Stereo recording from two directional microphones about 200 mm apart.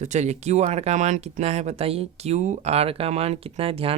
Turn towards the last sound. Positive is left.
turn(degrees=-30)  # may be behind; listen again after turning